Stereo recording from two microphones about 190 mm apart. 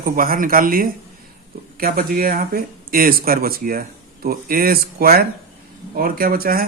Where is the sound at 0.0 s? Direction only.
50° right (ahead or behind).